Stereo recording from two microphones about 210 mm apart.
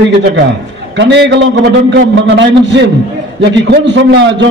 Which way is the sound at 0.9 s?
55° right (ahead or behind).